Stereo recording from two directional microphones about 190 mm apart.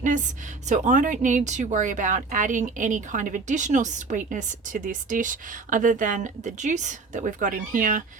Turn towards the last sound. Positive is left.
turn(degrees=-45)  # may be behind; listen again after turning